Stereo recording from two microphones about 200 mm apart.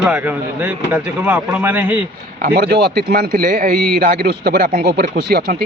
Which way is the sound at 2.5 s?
50° right (ahead or behind).